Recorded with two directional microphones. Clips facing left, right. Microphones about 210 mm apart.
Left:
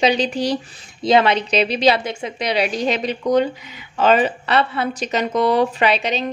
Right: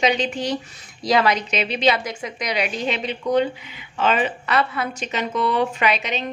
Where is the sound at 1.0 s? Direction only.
25° left (ahead or behind).